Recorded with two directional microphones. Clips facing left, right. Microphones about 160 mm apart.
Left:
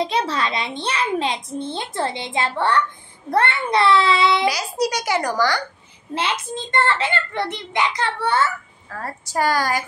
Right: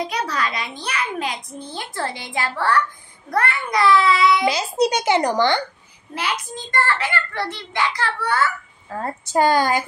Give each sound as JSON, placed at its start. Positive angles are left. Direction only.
{"t": 0.0, "sound": "a child's voice", "side_deg": 25}
{"t": 4.5, "sound": "speech", "side_deg": -25}
{"t": 6.1, "sound": "a child's voice", "side_deg": 25}
{"t": 8.9, "sound": "speech", "side_deg": -20}